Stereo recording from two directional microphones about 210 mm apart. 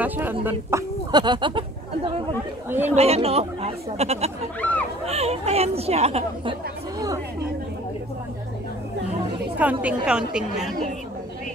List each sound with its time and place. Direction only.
0.0 s speech: 10° right (ahead or behind)
2.9 s speech: 30° right (ahead or behind)
4.6 s speech: 5° left (ahead or behind)
5.0 s speech: 30° right (ahead or behind)
9.6 s a woman's voice: 5° right (ahead or behind)